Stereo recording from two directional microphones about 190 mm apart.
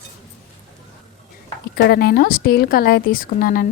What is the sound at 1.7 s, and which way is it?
Speech, 55° left (ahead or behind).